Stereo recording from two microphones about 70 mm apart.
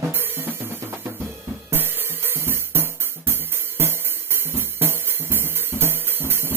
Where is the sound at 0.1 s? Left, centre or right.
Right.